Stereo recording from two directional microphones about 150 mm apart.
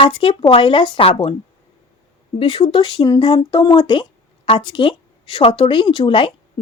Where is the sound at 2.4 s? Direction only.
30° left (ahead or behind).